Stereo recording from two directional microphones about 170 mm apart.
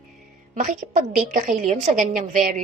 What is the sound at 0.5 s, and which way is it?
A woman's voice, 45° right (ahead or behind).